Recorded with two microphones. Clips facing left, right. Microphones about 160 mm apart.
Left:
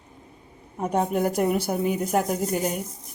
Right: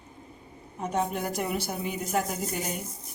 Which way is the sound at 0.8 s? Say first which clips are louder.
Left 6 dB; 55° left (ahead or behind).